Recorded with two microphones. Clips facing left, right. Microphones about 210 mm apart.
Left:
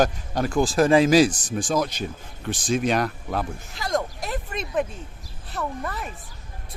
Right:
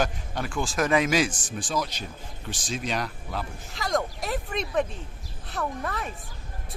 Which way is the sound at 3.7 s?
Centre (ahead or behind).